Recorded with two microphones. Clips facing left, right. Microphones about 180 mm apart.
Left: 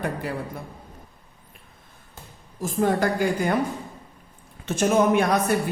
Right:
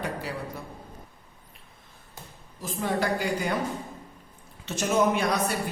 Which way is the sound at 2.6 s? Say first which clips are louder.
Left 6 dB; 45° left (ahead or behind).